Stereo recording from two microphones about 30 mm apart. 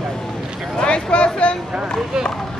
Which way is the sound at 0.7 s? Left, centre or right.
Left.